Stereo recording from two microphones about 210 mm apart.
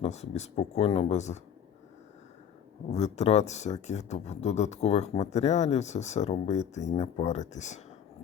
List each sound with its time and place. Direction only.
0.0 s speech: 30° left (ahead or behind)
2.9 s speech: 30° left (ahead or behind)